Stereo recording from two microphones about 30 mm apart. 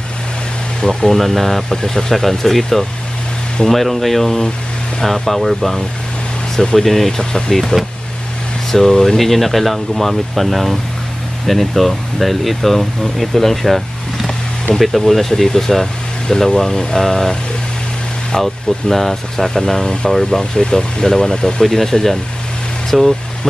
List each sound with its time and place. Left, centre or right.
0.7 s speech: centre
1.1 s speech: centre
6.8 s speech: centre
18.4 s speech: centre
20.5 s speech: left